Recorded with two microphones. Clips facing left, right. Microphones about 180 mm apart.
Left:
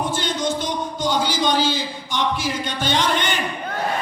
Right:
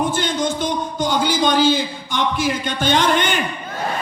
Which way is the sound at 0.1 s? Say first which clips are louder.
Right 2 dB; 50° right (ahead or behind).